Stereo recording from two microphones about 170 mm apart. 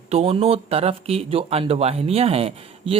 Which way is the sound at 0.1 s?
35° right (ahead or behind).